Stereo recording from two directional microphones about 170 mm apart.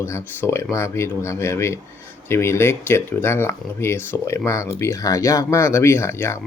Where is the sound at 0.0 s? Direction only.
15° left (ahead or behind).